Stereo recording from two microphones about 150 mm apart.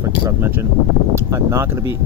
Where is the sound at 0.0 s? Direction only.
15° right (ahead or behind).